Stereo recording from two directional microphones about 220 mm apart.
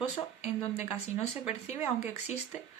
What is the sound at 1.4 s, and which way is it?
Speech, 30° left (ahead or behind).